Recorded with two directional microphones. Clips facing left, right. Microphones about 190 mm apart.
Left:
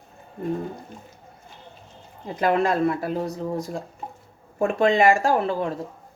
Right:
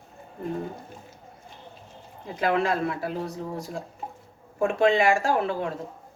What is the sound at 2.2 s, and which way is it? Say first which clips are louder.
Speech: left 3 dB; 45° left (ahead or behind).